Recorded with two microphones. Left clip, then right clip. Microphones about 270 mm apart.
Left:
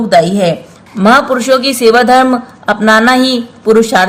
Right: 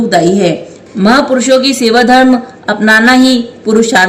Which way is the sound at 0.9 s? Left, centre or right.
Left.